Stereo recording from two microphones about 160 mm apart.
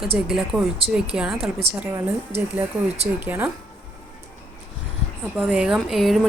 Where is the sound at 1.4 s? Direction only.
40° right (ahead or behind).